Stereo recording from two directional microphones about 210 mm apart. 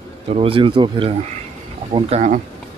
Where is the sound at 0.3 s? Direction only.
25° right (ahead or behind).